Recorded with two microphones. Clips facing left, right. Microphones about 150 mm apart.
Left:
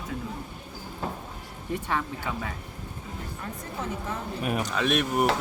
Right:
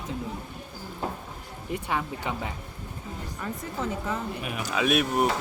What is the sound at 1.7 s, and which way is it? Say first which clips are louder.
Speech: even; 15° right (ahead or behind).